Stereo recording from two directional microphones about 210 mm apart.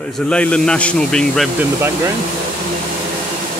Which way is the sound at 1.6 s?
10° right (ahead or behind).